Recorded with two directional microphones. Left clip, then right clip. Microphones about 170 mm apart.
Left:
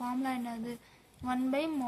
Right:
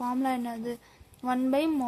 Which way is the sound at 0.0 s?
50° right (ahead or behind).